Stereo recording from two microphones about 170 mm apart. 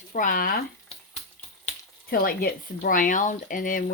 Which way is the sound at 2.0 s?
60° left (ahead or behind).